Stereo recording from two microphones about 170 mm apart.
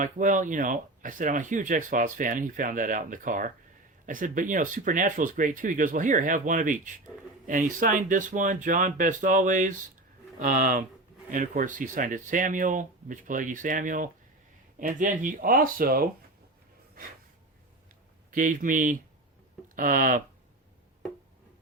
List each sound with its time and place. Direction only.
0.0 s speech: 50° right (ahead or behind)
18.3 s speech: 50° right (ahead or behind)